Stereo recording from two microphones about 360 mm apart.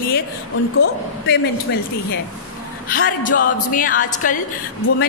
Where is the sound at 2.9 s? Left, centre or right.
Left.